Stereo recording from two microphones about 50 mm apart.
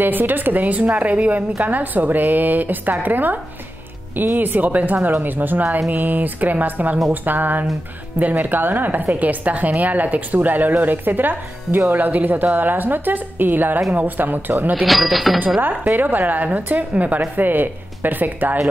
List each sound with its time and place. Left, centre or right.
0.0 s a woman's voice: right
14.9 s speech: centre
15.6 s a woman's voice: right